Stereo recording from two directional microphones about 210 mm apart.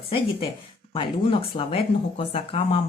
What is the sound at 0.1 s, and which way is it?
Speech, 25° left (ahead or behind).